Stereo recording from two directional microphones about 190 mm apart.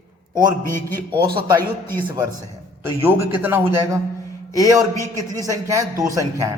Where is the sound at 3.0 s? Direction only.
10° right (ahead or behind).